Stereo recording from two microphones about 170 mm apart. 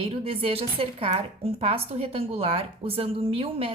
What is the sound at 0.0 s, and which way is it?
A woman's voice, 35° right (ahead or behind).